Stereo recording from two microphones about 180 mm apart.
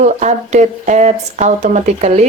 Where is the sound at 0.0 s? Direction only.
40° right (ahead or behind).